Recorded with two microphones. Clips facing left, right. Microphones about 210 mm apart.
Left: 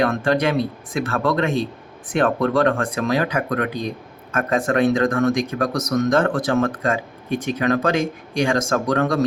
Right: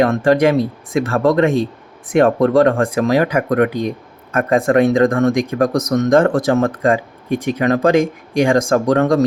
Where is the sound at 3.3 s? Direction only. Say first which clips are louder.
Right 7 dB; 45° right (ahead or behind).